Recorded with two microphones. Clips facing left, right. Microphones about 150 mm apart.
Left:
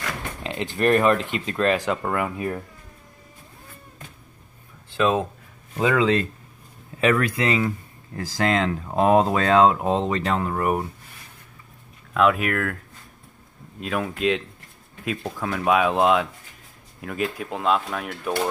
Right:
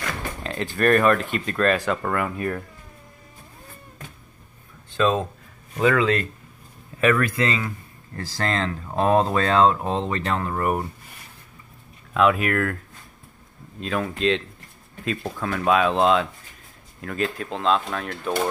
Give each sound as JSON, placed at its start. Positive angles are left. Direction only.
{"t": 0.4, "sound": "speech", "side_deg": 20}
{"t": 4.9, "sound": "speech", "side_deg": 10}
{"t": 12.1, "sound": "speech", "side_deg": 0}
{"t": 13.7, "sound": "speech", "side_deg": 10}